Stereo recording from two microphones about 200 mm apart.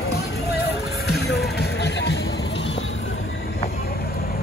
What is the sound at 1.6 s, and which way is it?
Music, 55° left (ahead or behind).